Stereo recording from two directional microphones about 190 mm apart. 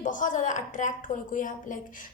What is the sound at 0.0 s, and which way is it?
A woman's voice, 45° left (ahead or behind).